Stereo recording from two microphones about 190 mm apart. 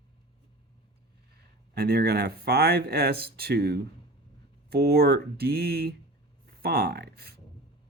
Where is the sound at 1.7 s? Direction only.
55° right (ahead or behind).